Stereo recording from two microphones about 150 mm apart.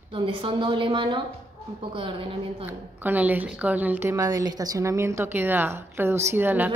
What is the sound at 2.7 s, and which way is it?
A woman's voice, 10° right (ahead or behind).